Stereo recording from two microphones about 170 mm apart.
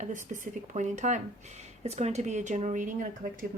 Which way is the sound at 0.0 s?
45° right (ahead or behind).